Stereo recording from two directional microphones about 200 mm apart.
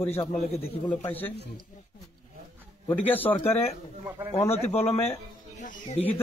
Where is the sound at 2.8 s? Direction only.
10° left (ahead or behind).